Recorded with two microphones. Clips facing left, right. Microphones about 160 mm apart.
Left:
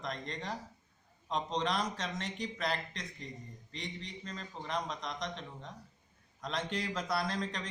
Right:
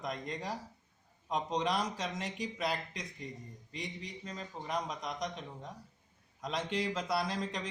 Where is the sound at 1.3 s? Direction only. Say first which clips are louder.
Right 1 dB; 5° right (ahead or behind).